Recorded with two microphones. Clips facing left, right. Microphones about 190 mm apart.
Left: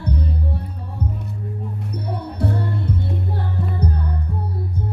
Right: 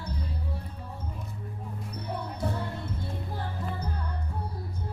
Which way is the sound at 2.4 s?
65° left (ahead or behind).